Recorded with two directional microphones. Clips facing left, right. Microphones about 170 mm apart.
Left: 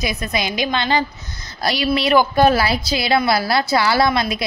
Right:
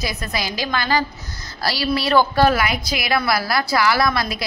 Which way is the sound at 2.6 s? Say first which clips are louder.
Left 3 dB; 30° left (ahead or behind).